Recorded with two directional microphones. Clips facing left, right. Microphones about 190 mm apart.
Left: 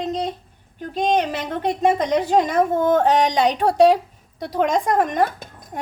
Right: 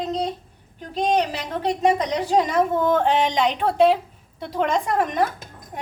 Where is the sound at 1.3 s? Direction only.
50° left (ahead or behind).